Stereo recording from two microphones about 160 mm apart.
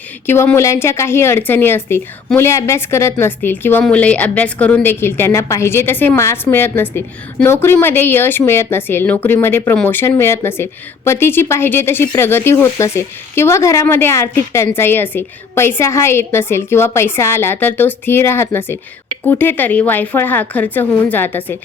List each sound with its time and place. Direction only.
0.3 s speech: 15° left (ahead or behind)